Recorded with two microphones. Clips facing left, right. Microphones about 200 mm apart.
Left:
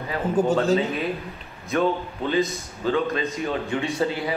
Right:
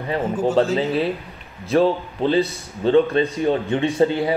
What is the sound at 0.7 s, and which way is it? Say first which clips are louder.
A man's voice: right 4 dB; 30° right (ahead or behind).